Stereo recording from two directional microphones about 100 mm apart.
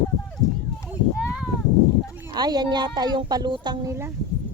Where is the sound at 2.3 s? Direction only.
45° right (ahead or behind).